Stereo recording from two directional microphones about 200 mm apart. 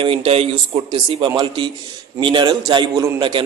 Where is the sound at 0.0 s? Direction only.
30° right (ahead or behind).